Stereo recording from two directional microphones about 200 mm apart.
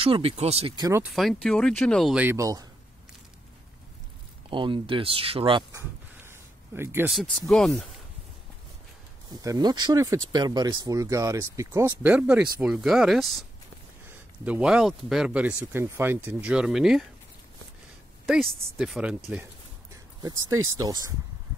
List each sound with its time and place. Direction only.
0.0 s speech: 30° right (ahead or behind)
1.1 s speech: centre (ahead or behind); by 2.7 s 15° right (ahead or behind)
4.5 s speech: 25° right (ahead or behind)
7.2 s speech: centre (ahead or behind)
9.4 s speech: 20° right (ahead or behind); by 17.0 s centre (ahead or behind)
18.2 s speech: centre (ahead or behind)
19.9 s a sound: 20° right (ahead or behind)
20.8 s speech: 15° right (ahead or behind)